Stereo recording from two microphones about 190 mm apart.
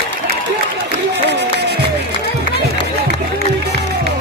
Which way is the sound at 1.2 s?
60° right (ahead or behind).